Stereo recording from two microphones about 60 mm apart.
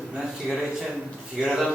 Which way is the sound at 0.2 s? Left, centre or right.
Centre.